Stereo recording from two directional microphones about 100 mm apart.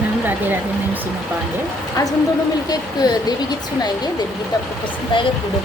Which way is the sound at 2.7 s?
45° left (ahead or behind).